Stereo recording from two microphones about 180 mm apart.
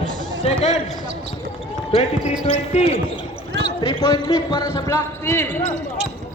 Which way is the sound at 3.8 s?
25° left (ahead or behind).